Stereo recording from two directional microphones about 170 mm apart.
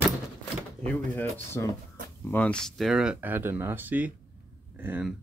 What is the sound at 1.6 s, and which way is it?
Speech, 15° left (ahead or behind).